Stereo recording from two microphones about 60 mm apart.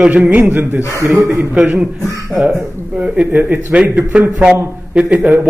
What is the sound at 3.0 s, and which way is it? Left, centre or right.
A man's voice, right.